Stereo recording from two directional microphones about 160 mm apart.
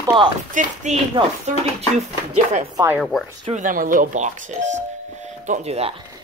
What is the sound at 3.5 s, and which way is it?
Speech, 55° right (ahead or behind).